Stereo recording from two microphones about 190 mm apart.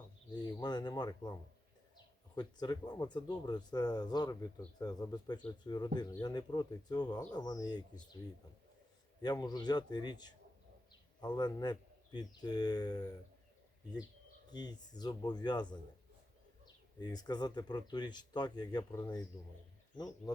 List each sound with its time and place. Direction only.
0.6 s speech: 20° left (ahead or behind)
9.2 s speech: 20° left (ahead or behind)
14.5 s speech: 20° left (ahead or behind)